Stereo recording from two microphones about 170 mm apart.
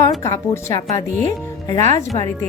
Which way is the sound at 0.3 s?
20° left (ahead or behind).